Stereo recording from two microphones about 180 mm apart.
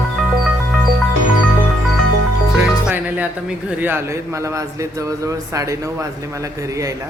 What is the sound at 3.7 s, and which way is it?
Speech, 10° right (ahead or behind).